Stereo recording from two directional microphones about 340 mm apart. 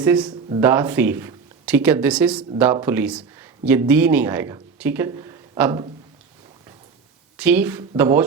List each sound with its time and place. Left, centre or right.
0.0 s speech: centre
7.3 s speech: centre